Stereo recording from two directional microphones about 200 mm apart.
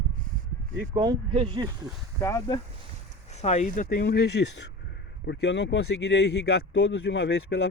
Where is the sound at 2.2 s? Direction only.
15° left (ahead or behind).